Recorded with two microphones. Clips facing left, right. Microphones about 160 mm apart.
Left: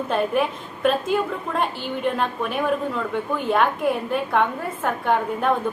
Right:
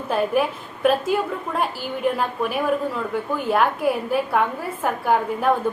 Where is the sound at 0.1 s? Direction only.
5° right (ahead or behind).